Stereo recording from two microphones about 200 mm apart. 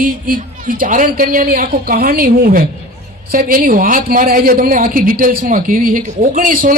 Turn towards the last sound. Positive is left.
turn(degrees=-45)  # may be behind; listen again after turning